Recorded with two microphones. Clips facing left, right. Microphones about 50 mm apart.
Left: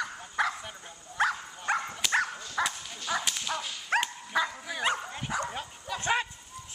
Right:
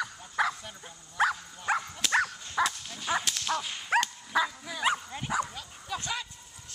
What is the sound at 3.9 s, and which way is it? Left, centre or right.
Dog, centre.